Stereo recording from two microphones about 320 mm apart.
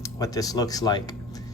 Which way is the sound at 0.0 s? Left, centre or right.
Centre.